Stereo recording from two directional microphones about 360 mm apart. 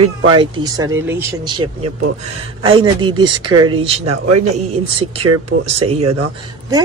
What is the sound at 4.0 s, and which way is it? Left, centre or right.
Speech, right.